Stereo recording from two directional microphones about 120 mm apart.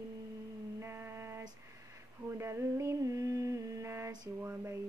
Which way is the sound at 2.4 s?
20° right (ahead or behind).